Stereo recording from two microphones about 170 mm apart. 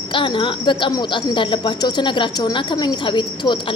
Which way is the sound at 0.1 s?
30° left (ahead or behind).